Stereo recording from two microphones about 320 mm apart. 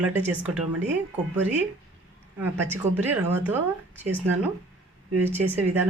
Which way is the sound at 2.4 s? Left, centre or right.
Centre.